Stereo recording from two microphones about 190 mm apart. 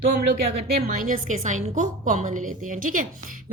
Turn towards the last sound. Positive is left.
turn(degrees=-45)  # may be behind; listen again after turning